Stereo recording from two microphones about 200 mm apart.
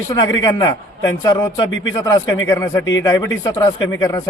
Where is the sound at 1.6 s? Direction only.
70° left (ahead or behind).